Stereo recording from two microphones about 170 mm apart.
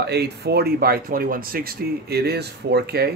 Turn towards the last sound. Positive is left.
turn(degrees=-70)  # may be behind; listen again after turning